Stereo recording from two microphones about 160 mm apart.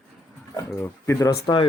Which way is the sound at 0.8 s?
20° left (ahead or behind).